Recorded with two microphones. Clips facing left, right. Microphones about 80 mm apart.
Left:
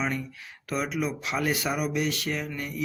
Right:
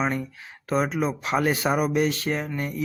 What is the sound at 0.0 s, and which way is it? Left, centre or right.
Speech, right.